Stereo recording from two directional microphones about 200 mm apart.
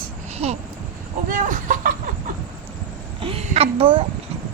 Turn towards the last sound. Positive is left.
turn(degrees=-25)  # may be behind; listen again after turning